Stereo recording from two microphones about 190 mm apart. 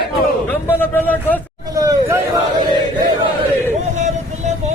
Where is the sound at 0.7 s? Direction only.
10° left (ahead or behind).